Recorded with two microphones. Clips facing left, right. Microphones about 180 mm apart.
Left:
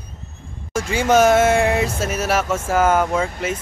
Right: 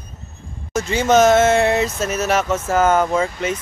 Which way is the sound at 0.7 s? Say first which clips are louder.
Right 1 dB; 10° left (ahead or behind).